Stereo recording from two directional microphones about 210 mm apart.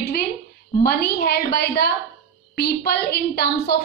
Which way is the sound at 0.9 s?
50° left (ahead or behind).